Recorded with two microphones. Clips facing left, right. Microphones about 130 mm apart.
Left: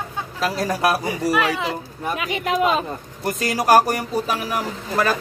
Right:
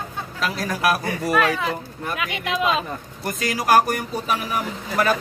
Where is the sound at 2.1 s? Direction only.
35° left (ahead or behind).